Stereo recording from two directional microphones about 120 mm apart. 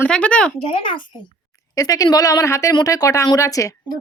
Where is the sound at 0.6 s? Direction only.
45° left (ahead or behind).